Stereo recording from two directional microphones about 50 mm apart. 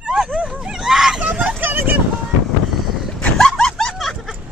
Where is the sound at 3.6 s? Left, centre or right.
Centre.